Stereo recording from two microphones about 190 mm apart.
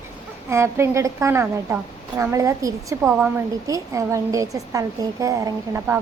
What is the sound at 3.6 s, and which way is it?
A woman's voice, 15° right (ahead or behind).